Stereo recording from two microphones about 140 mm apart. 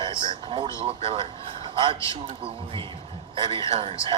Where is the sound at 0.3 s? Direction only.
40° right (ahead or behind).